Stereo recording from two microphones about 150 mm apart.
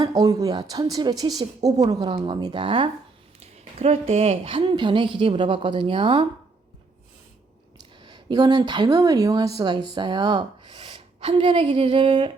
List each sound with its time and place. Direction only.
0.0 s a woman's voice: 25° right (ahead or behind)
3.4 s speech: 45° right (ahead or behind)
4.7 s a woman's voice: 30° right (ahead or behind)
8.0 s a woman's voice: 30° right (ahead or behind)